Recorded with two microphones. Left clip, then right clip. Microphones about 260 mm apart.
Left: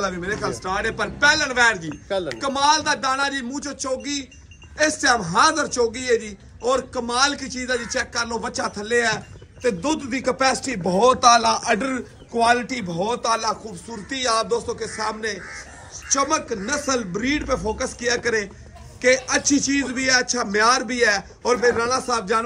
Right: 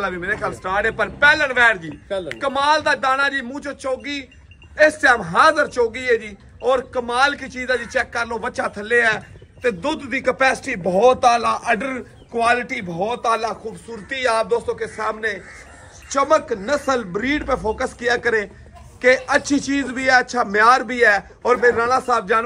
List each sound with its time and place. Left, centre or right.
0.0 s a man's voice: centre
2.0 s speech: left
2.3 s a man's voice: centre